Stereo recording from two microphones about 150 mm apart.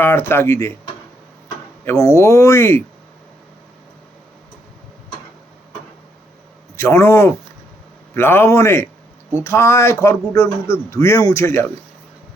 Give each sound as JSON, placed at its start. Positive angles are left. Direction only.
{"t": 0.0, "sound": "a man's voice", "side_deg": 15}
{"t": 1.8, "sound": "speech", "side_deg": 20}
{"t": 6.7, "sound": "a man's voice", "side_deg": 20}